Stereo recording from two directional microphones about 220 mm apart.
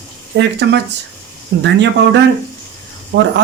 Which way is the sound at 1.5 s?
50° right (ahead or behind).